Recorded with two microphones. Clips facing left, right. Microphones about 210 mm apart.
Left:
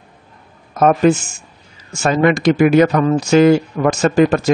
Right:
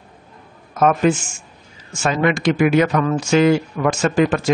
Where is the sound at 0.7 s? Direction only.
40° left (ahead or behind).